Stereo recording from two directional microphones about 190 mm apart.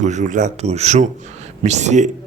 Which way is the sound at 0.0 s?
40° right (ahead or behind).